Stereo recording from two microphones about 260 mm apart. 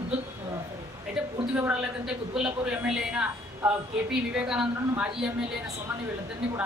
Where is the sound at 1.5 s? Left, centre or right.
Centre.